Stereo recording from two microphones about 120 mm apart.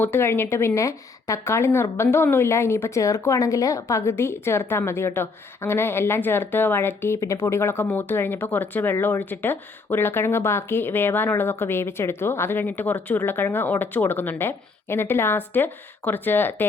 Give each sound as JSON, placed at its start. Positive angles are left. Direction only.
{"t": 0.0, "sound": "speech", "side_deg": 20}